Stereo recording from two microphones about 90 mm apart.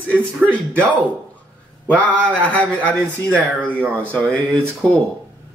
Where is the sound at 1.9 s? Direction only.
15° left (ahead or behind).